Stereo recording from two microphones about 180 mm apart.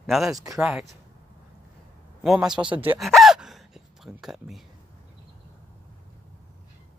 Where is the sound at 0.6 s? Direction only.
5° right (ahead or behind).